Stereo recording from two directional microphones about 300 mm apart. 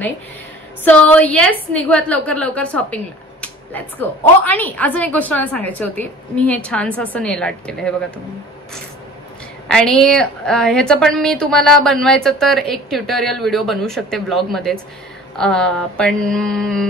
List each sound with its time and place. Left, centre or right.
0.8 s a woman's voice: centre
9.7 s a woman's voice: centre